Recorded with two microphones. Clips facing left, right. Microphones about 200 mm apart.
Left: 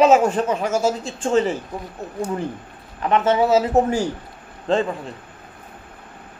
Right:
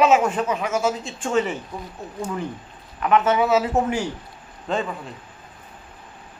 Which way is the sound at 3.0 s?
30° left (ahead or behind).